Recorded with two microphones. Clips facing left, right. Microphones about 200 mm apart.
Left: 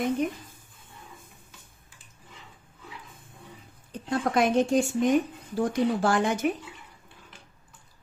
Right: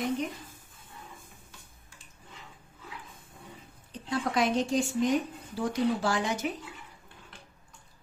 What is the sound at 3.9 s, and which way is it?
A woman's voice, 50° left (ahead or behind).